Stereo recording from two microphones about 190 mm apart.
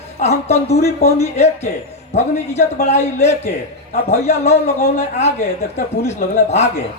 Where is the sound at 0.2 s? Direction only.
35° left (ahead or behind).